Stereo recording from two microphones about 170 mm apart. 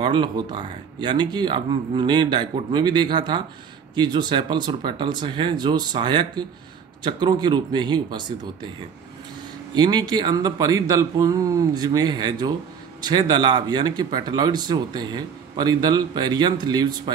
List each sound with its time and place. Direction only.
0.0 s speech: 25° right (ahead or behind)
9.8 s speech: 25° right (ahead or behind)